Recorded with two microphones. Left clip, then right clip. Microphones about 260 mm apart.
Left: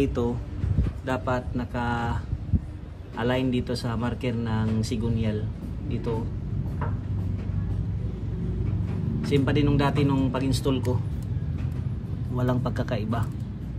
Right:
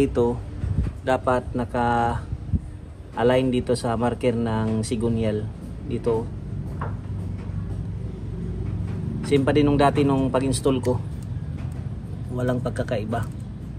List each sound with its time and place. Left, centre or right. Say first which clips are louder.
0.0 s speech: right 5 dB; centre
3.2 s speech: right 6 dB; centre
9.3 s speech: right 5 dB; centre
12.4 s speech: right 3 dB; left